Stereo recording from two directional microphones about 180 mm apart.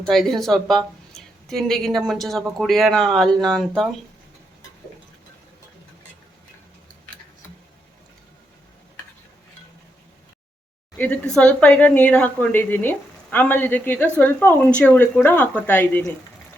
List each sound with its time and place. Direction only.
0.0 s a woman's voice: centre (ahead or behind)
10.9 s speech: 5° left (ahead or behind)